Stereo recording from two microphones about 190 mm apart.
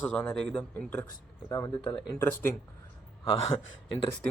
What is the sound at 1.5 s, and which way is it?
Speech, 20° left (ahead or behind).